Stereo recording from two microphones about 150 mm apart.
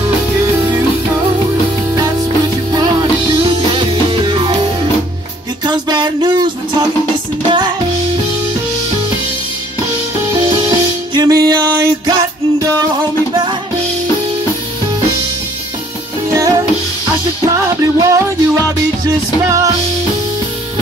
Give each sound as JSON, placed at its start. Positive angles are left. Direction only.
{"t": 2.7, "sound": "music", "side_deg": -25}
{"t": 5.7, "sound": "music", "side_deg": -30}
{"t": 11.1, "sound": "music", "side_deg": -25}
{"t": 16.3, "sound": "music", "side_deg": -20}